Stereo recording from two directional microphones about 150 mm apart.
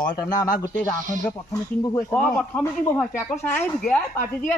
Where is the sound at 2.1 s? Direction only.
5° left (ahead or behind).